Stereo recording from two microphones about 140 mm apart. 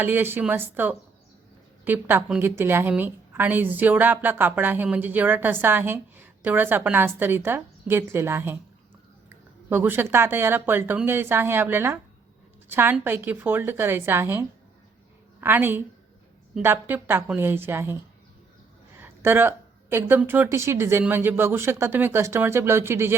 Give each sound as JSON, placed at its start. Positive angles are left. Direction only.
{"t": 0.0, "sound": "a woman's voice", "side_deg": -15}
{"t": 9.6, "sound": "a woman's voice", "side_deg": -15}
{"t": 18.9, "sound": "a woman's voice", "side_deg": -15}